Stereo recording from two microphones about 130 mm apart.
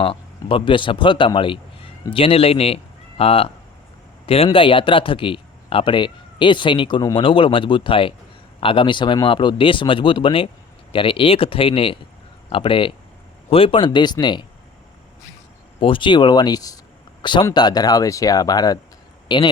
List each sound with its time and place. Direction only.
0.0 s a man's voice: 45° left (ahead or behind)
4.5 s speech: 40° left (ahead or behind)
15.8 s speech: 40° left (ahead or behind)